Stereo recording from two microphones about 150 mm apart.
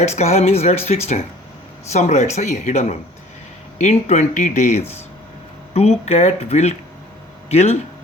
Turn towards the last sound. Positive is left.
turn(degrees=45)  # may be behind; listen again after turning